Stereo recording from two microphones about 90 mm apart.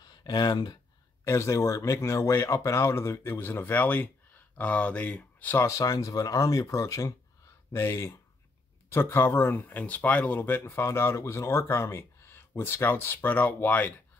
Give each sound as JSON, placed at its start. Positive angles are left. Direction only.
{"t": 0.0, "sound": "speech", "side_deg": 50}
{"t": 1.2, "sound": "speech", "side_deg": 30}
{"t": 5.7, "sound": "speech", "side_deg": 40}